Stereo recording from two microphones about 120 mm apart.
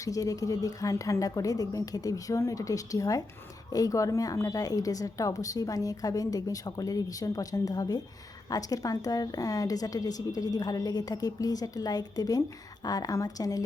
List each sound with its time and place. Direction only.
0.0 s a woman's voice: 30° left (ahead or behind)